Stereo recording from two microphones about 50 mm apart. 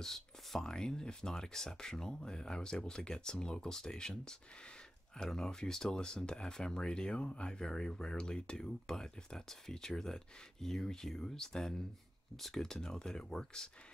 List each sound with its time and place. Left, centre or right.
0.0 s speech: centre